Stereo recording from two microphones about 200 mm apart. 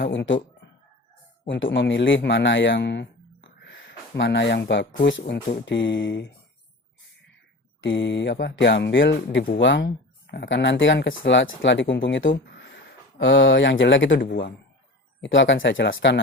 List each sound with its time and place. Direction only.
0.0 s speech: 65° left (ahead or behind)
1.5 s speech: 70° left (ahead or behind)
3.6 s a sound: 60° left (ahead or behind)
5.6 s speech: 65° left (ahead or behind)
7.8 s speech: 65° left (ahead or behind); by 9.6 s 50° left (ahead or behind)
9.6 s speech: 65° left (ahead or behind)
11.9 s speech: 50° left (ahead or behind)
12.2 s speech: 60° left (ahead or behind)
15.2 s speech: 65° left (ahead or behind)